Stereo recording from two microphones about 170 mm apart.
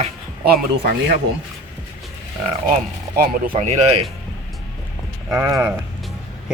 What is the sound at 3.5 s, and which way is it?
Speech, 40° right (ahead or behind).